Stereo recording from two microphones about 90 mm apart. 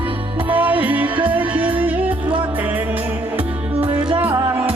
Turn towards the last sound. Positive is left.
turn(degrees=-10)  # may be behind; listen again after turning